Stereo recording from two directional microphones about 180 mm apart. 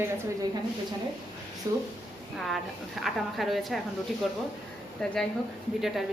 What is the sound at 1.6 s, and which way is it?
Speech, 20° right (ahead or behind).